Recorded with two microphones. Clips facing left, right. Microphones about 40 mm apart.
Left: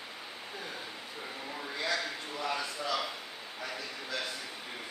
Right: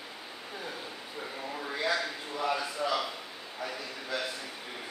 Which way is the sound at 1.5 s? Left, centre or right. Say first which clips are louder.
Right 3 dB; centre.